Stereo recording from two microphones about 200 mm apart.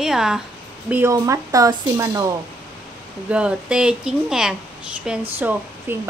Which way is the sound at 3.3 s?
5° right (ahead or behind).